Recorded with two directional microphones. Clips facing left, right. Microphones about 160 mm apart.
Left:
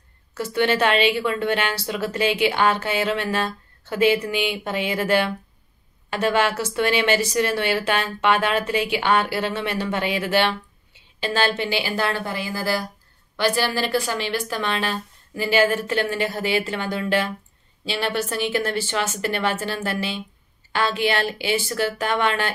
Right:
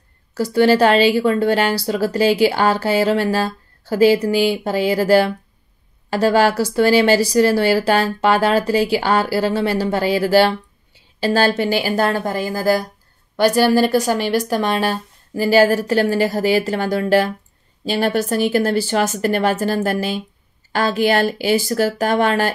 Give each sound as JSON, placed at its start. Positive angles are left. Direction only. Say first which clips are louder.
{"t": 0.3, "sound": "a woman's voice", "louder": "right 7 dB", "side_deg": -35}